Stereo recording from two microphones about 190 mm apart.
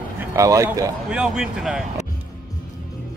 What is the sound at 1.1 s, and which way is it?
Speech, 5° right (ahead or behind).